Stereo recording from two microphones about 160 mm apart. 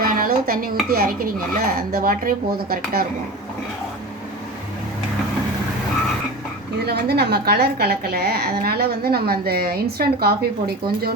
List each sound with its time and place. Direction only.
0.0 s dishes: 65° right (ahead or behind)
0.9 s a woman's voice: 65° right (ahead or behind)
6.8 s a woman's voice: 85° right